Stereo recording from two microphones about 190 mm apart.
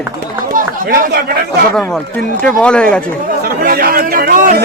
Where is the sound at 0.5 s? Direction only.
45° right (ahead or behind).